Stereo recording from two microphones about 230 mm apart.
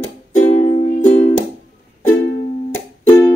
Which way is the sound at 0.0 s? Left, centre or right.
Left.